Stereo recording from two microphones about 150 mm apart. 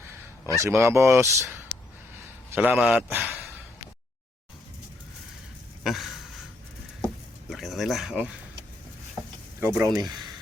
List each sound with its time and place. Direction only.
0.5 s speech: 20° right (ahead or behind)
2.6 s speech: 5° right (ahead or behind)
5.8 s a sound: centre (ahead or behind)
7.5 s speech: centre (ahead or behind)
9.6 s speech: 15° right (ahead or behind)